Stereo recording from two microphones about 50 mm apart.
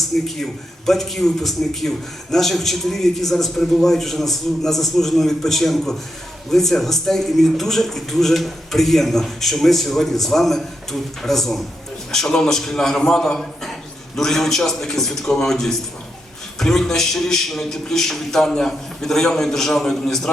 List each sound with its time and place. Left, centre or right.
0.1 s a man's voice: centre